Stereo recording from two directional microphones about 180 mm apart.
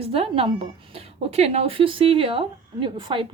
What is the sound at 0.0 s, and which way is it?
A woman's voice, 30° right (ahead or behind).